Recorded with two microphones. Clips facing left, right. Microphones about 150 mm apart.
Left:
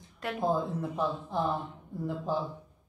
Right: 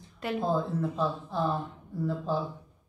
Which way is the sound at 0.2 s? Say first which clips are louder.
Right 3 dB; centre (ahead or behind).